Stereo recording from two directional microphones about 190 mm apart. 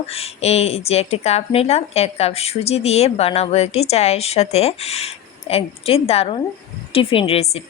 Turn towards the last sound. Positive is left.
turn(degrees=30)  # may be behind; listen again after turning